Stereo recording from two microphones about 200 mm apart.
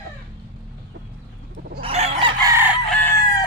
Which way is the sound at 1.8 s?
30° right (ahead or behind).